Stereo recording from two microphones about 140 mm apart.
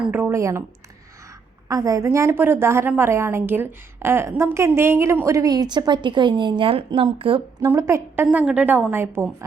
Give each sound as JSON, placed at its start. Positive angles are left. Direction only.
{"t": 0.0, "sound": "a woman's voice", "side_deg": -10}
{"t": 1.6, "sound": "a woman's voice", "side_deg": -25}
{"t": 7.6, "sound": "a woman's voice", "side_deg": -20}